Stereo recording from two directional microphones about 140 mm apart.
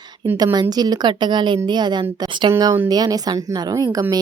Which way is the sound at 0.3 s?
30° right (ahead or behind).